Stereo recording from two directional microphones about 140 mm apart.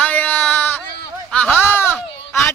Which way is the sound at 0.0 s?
10° left (ahead or behind).